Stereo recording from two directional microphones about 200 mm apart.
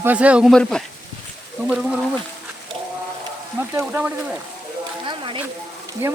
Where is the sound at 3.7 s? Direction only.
10° right (ahead or behind).